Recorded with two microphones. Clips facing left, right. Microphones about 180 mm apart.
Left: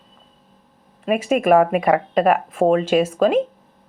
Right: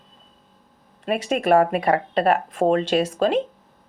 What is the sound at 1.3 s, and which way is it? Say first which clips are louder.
Speech: left 3 dB; 35° right (ahead or behind).